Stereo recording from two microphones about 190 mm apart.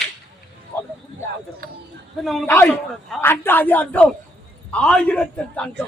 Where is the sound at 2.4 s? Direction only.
10° left (ahead or behind).